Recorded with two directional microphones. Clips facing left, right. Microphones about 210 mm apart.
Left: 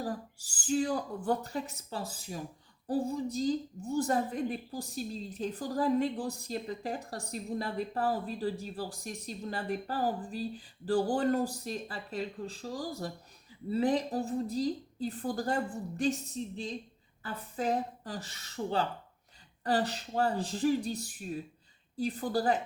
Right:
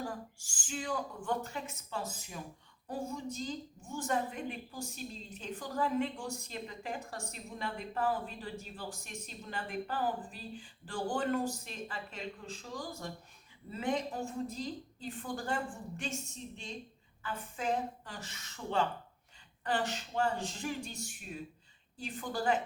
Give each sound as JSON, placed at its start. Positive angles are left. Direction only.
{"t": 0.0, "sound": "a woman's voice", "side_deg": 35}